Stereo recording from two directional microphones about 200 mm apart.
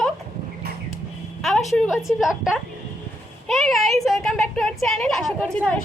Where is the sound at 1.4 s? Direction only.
Centre (ahead or behind).